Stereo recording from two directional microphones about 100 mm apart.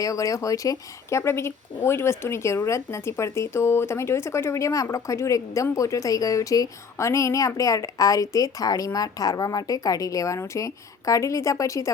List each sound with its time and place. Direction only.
0.0 s a woman's voice: 35° left (ahead or behind)